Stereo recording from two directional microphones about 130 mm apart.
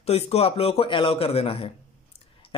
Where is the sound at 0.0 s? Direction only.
55° left (ahead or behind).